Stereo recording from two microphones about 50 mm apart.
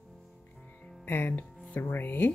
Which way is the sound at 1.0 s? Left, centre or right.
Left.